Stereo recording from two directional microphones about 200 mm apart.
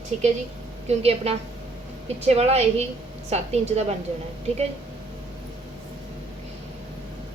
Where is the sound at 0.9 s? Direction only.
30° right (ahead or behind).